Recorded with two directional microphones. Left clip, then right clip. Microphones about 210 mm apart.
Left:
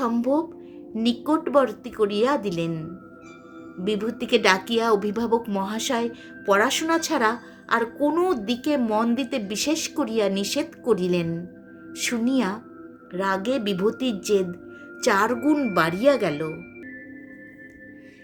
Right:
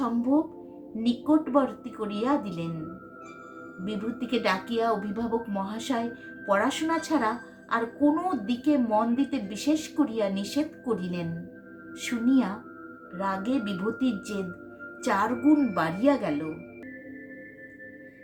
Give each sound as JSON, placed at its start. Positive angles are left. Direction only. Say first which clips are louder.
{"t": 0.0, "sound": "music", "louder": "left 4 dB", "side_deg": 45}
{"t": 0.9, "sound": "speech", "louder": "left 2 dB", "side_deg": 45}
{"t": 3.8, "sound": "speech", "louder": "left 8 dB", "side_deg": 45}